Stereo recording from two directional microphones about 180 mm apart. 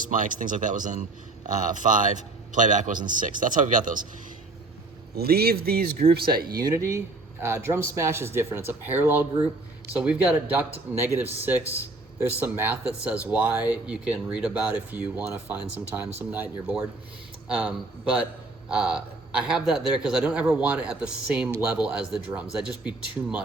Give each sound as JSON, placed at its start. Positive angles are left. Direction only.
{"t": 0.0, "sound": "speech", "side_deg": -45}
{"t": 5.1, "sound": "speech", "side_deg": -60}
{"t": 6.5, "sound": "a man's voice", "side_deg": -20}